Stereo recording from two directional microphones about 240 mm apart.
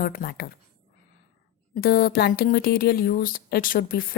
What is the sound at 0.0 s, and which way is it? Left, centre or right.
Speech, left.